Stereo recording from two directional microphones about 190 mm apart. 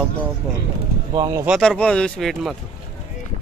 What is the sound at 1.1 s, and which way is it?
Speech, 20° right (ahead or behind).